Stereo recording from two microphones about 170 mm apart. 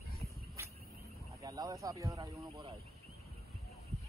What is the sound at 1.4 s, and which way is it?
Speech, 20° right (ahead or behind).